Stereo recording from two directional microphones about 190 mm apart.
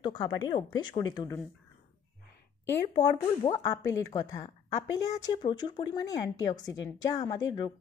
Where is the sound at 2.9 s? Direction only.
20° left (ahead or behind).